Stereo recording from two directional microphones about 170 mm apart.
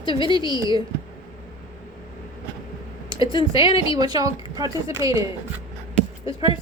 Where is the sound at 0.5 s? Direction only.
25° right (ahead or behind).